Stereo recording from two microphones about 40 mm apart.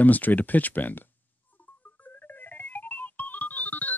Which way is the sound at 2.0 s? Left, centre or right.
Left.